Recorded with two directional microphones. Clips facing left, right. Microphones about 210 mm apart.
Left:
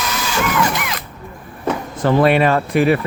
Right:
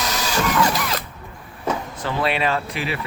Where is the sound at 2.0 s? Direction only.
50° left (ahead or behind).